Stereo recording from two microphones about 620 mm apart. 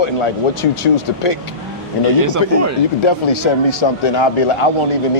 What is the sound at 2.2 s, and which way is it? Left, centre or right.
Speech, right.